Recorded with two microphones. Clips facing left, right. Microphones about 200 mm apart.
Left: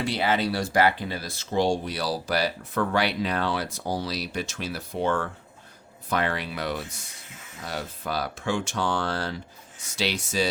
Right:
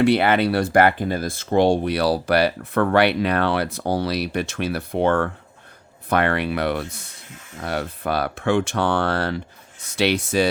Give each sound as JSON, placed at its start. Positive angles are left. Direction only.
{"t": 0.0, "sound": "speech", "side_deg": -60}